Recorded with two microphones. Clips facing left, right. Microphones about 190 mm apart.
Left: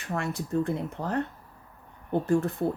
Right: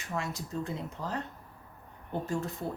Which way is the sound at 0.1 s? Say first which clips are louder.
Left 6 dB; 60° left (ahead or behind).